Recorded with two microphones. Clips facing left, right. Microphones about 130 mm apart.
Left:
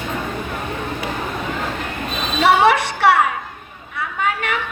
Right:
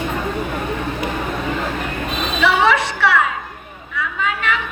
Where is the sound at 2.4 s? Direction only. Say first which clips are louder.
Left 2 dB; 60° left (ahead or behind).